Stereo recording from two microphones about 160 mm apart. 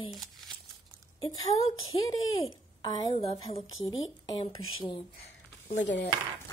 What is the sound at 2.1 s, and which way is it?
Speech, 25° left (ahead or behind).